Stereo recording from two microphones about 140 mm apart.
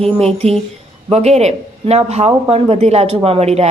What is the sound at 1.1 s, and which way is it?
A woman's voice, 50° right (ahead or behind).